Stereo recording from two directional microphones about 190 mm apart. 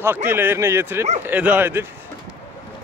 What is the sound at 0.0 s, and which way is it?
A man's voice, 10° right (ahead or behind).